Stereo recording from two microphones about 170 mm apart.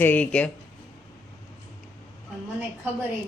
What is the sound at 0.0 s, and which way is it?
Speech, 10° left (ahead or behind).